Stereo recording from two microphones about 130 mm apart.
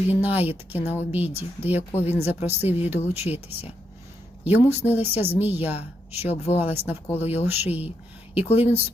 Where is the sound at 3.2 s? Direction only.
50° left (ahead or behind).